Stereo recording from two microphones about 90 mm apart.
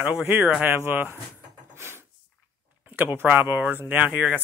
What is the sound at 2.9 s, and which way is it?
Speech, 20° right (ahead or behind).